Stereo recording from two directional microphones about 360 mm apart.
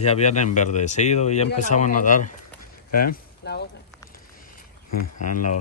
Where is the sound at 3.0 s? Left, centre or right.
Left.